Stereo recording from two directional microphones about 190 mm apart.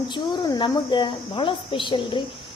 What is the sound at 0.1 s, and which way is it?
Speech, 20° left (ahead or behind).